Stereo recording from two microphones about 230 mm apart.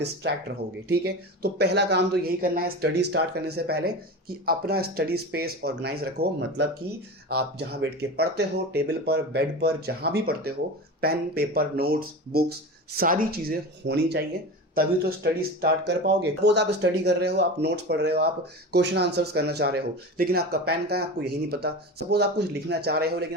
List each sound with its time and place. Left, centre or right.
0.0 s speech: right